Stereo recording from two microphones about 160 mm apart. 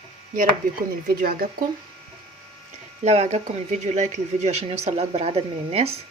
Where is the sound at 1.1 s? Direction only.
70° right (ahead or behind).